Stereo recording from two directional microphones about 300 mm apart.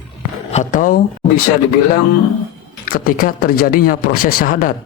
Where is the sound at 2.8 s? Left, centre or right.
Left.